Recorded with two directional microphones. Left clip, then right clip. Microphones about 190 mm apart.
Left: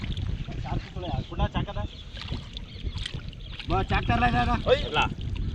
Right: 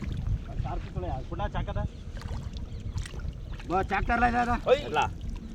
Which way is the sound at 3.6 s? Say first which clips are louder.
Even; 45° left (ahead or behind).